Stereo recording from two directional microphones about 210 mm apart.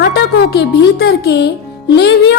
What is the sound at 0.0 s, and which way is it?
Speech, 50° left (ahead or behind).